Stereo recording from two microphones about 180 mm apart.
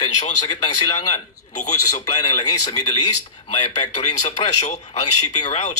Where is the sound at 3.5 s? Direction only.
40° left (ahead or behind).